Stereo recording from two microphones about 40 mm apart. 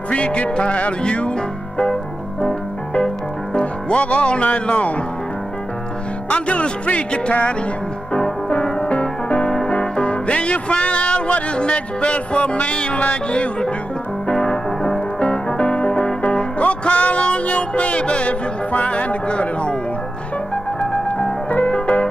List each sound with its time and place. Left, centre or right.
0.1 s speech: left
2.4 s music: left
3.5 s speech: left
6.3 s speech: left
8.8 s music: left
14.3 s music: centre
15.1 s music: left
16.2 s music: left
21.2 s music: left